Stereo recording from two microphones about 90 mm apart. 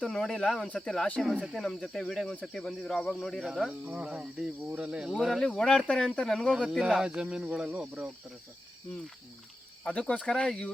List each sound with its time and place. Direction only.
0.0 s speech: 5° left (ahead or behind)
3.8 s speech: 15° right (ahead or behind)
5.4 s speech: 10° left (ahead or behind)
6.5 s speech: 5° right (ahead or behind)
9.8 s speech: 15° left (ahead or behind)